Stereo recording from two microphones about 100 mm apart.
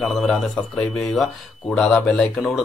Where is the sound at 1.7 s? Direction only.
5° left (ahead or behind).